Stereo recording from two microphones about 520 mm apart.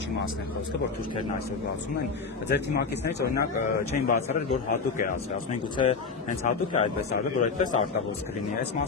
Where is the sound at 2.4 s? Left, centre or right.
Centre.